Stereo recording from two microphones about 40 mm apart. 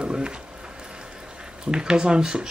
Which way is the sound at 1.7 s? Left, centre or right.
Centre.